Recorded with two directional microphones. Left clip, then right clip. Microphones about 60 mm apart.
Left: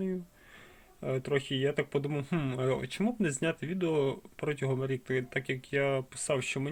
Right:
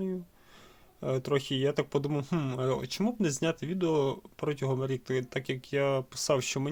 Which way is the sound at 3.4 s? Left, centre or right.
Right.